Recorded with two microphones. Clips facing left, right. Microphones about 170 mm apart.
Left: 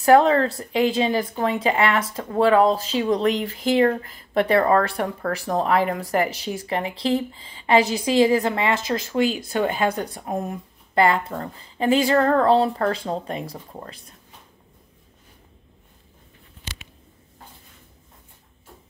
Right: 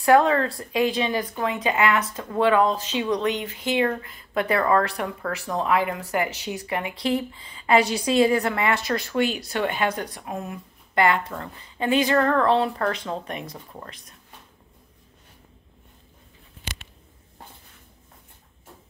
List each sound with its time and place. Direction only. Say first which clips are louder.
0.0 s a woman's voice: left 3 dB; 30° left (ahead or behind)
9.4 s speech: left 3 dB; 40° left (ahead or behind)